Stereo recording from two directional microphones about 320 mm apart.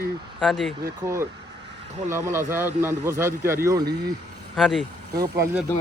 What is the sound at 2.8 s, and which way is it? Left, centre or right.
Speech, right.